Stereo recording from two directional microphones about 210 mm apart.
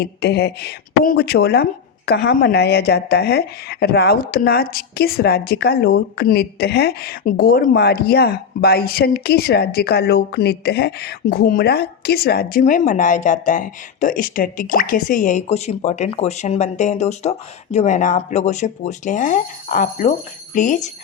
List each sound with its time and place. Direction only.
0.0 s a woman's voice: 50° left (ahead or behind)